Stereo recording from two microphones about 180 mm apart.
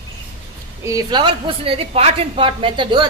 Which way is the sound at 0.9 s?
20° right (ahead or behind).